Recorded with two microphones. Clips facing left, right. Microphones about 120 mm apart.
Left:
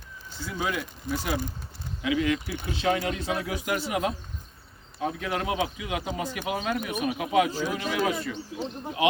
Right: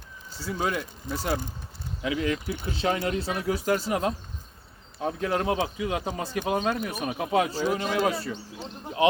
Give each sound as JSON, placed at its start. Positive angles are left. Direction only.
{"t": 0.3, "sound": "speech", "side_deg": -35}